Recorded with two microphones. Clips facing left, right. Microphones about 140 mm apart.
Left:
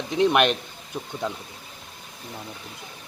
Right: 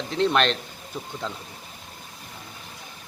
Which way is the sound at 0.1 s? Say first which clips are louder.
Left 2 dB; 15° left (ahead or behind).